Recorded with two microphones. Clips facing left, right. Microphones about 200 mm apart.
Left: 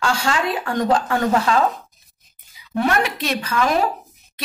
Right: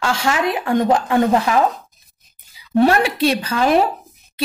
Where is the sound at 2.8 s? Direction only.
30° right (ahead or behind).